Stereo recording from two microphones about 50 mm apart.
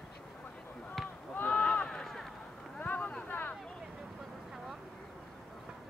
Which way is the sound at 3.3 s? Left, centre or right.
Left.